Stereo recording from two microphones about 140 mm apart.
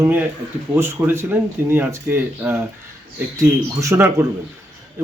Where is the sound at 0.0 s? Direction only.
15° right (ahead or behind).